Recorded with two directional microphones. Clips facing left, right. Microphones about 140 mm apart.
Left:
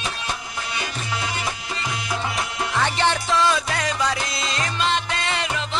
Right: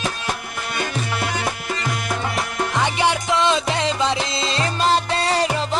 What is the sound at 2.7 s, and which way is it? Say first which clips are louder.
Music: right 1 dB; 15° right (ahead or behind).